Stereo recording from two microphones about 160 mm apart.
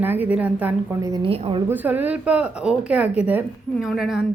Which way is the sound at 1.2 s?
35° right (ahead or behind).